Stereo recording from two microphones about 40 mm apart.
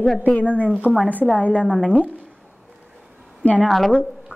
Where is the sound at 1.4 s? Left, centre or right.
Left.